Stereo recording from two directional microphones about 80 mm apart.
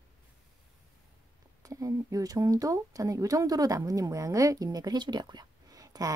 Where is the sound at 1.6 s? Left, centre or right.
Right.